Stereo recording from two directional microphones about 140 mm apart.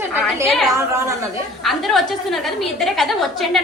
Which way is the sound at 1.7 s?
Centre (ahead or behind).